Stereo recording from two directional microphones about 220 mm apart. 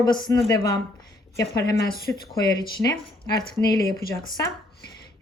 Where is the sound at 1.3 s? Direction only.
15° left (ahead or behind).